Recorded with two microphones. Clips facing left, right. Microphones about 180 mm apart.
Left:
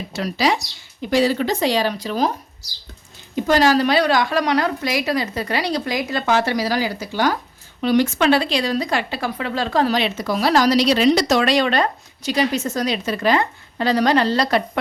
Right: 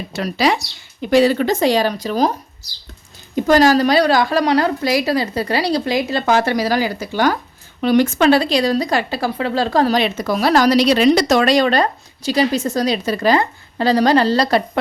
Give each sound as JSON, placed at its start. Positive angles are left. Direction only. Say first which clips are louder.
{"t": 0.1, "sound": "speech", "louder": "right 2 dB", "side_deg": -60}
{"t": 3.3, "sound": "speech", "louder": "right 3 dB", "side_deg": -45}
{"t": 6.3, "sound": "speech", "louder": "right 3 dB", "side_deg": -50}